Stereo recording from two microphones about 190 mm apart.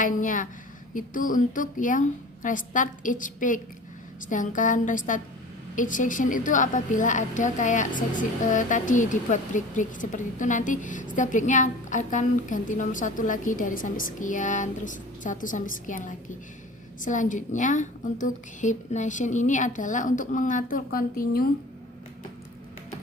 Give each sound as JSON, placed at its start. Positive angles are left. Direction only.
{"t": 0.0, "sound": "a woman's voice", "side_deg": 45}